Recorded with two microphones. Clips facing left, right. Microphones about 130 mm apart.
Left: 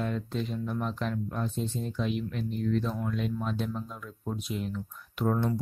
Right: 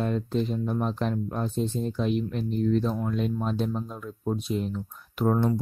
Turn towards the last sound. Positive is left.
turn(degrees=-35)  # may be behind; listen again after turning